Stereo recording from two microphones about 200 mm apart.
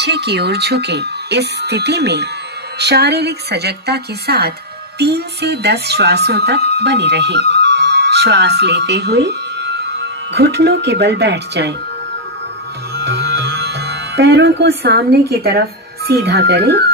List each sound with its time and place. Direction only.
0.0 s a woman's voice: 55° right (ahead or behind)
12.9 s speech: 55° right (ahead or behind)